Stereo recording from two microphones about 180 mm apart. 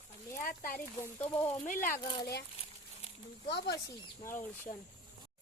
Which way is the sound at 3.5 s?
70° left (ahead or behind).